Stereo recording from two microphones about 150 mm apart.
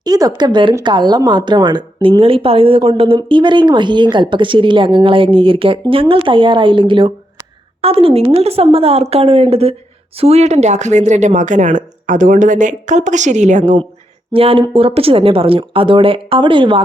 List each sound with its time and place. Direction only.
0.0 s speech: 25° right (ahead or behind); by 13.7 s 50° right (ahead or behind)
14.3 s speech: 40° right (ahead or behind)